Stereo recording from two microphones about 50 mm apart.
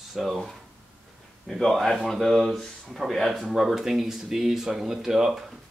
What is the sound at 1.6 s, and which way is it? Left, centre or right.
Speech, centre.